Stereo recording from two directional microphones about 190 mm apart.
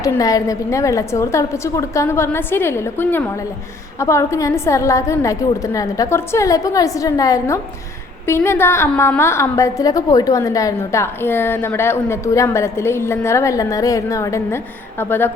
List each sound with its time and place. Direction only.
0.0 s a woman's voice: 20° left (ahead or behind)